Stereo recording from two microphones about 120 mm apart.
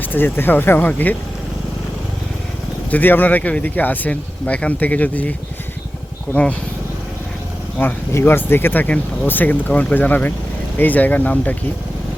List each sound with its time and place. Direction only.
0.0 s speech: 15° left (ahead or behind)
2.9 s speech: 15° left (ahead or behind)
6.3 s speech: 10° left (ahead or behind)
7.8 s speech: 15° left (ahead or behind)